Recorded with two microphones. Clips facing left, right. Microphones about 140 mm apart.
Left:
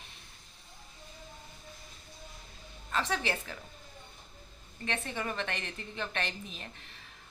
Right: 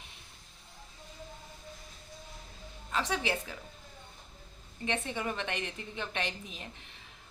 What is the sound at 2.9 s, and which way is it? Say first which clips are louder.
Speech: even; 10° right (ahead or behind).